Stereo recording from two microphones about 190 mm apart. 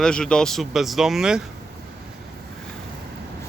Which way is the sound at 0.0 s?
5° left (ahead or behind).